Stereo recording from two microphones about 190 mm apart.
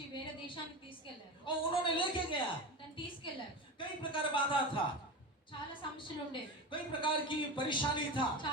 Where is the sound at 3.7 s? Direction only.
25° left (ahead or behind).